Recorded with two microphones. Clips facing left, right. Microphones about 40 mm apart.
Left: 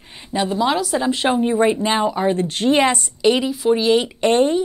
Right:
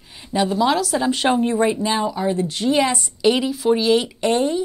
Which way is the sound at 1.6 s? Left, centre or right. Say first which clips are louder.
Left 2 dB; left.